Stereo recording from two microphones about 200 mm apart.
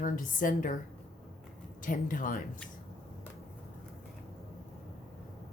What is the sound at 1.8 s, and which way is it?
Speech, 40° left (ahead or behind).